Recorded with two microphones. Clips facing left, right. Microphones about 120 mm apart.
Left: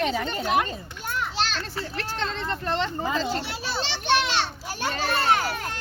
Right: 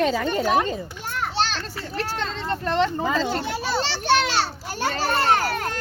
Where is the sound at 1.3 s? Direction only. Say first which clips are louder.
Right 3 dB; 35° right (ahead or behind).